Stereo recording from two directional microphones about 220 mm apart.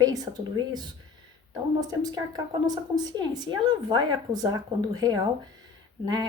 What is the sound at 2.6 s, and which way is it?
A woman's voice, 15° right (ahead or behind).